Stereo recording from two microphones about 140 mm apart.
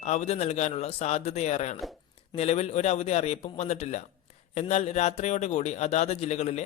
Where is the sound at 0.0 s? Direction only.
50° left (ahead or behind).